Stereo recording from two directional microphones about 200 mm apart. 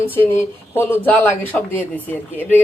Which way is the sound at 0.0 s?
10° left (ahead or behind).